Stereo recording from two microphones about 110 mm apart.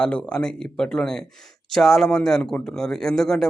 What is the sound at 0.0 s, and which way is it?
A man's voice, 10° left (ahead or behind).